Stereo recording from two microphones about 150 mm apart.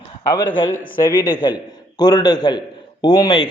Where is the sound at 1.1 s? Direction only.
15° right (ahead or behind).